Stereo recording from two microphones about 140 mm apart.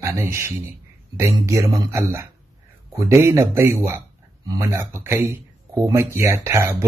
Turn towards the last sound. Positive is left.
turn(degrees=-20)  # may be behind; listen again after turning